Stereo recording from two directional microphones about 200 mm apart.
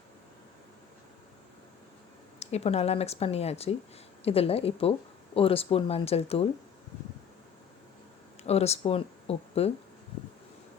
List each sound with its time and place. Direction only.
2.4 s speech: 30° left (ahead or behind)
8.4 s speech: 30° left (ahead or behind)